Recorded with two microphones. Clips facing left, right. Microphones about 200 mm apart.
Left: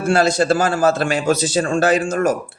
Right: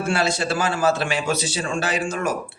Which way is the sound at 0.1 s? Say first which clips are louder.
Left 9 dB; 45° left (ahead or behind).